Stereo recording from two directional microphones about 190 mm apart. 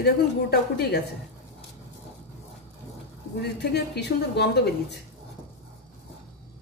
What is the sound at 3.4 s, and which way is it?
Speech, 60° left (ahead or behind).